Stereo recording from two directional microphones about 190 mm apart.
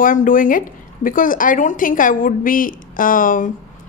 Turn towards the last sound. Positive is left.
turn(degrees=45)  # may be behind; listen again after turning